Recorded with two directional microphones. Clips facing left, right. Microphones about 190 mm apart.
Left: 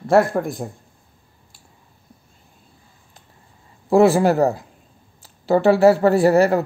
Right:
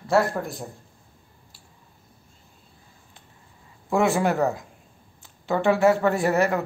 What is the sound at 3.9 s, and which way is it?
A man's voice, 35° left (ahead or behind).